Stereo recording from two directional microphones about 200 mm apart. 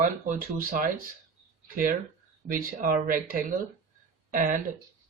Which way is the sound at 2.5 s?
45° right (ahead or behind).